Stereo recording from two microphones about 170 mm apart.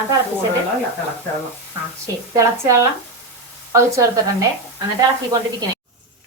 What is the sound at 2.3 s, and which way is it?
A woman's voice, 20° right (ahead or behind).